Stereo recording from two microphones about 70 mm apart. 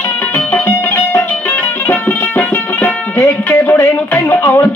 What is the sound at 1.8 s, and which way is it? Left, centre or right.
Music, left.